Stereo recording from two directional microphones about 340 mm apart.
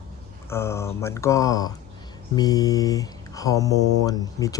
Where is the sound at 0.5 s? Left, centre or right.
Centre.